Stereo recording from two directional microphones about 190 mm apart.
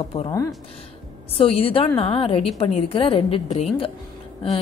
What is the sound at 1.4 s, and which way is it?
A woman's voice, 30° left (ahead or behind).